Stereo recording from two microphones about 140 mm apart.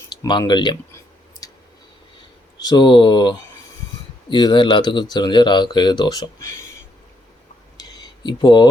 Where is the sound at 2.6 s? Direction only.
30° left (ahead or behind).